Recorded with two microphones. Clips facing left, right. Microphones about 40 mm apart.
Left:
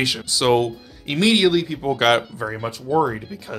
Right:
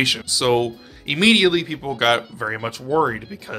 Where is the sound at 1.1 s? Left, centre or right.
Right.